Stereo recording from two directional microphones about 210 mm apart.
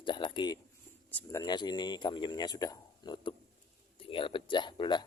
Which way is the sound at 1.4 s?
20° left (ahead or behind).